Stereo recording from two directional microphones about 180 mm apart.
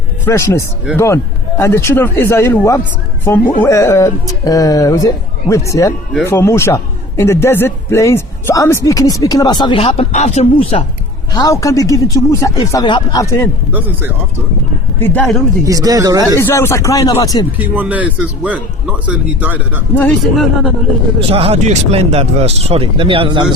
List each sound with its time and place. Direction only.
0.3 s a man's voice: 15° left (ahead or behind); by 10.8 s 35° left (ahead or behind)
11.3 s speech: 20° left (ahead or behind)
13.7 s speech: 10° right (ahead or behind)
14.9 s speech: 10° left (ahead or behind)
15.6 s speech: 20° right (ahead or behind)
16.4 s a man's voice: 15° left (ahead or behind)
17.6 s speech: 10° right (ahead or behind)
21.2 s speech: 30° right (ahead or behind)